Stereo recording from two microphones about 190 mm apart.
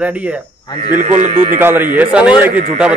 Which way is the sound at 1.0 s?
30° right (ahead or behind).